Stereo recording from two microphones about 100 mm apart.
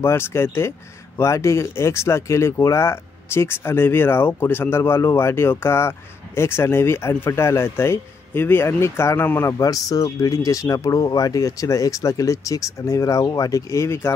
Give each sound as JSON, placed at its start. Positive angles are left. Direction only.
{"t": 0.0, "sound": "speech", "side_deg": 25}
{"t": 9.5, "sound": "speech", "side_deg": 35}